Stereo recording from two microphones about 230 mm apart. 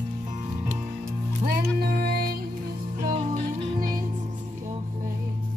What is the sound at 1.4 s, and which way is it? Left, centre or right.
Music, right.